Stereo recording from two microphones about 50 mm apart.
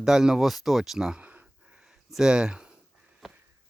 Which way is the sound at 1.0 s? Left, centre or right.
Centre.